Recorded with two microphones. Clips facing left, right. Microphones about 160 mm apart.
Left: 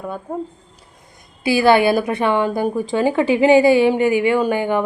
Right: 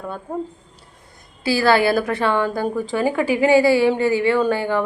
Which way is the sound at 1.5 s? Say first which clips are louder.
Left 3 dB; 20° left (ahead or behind).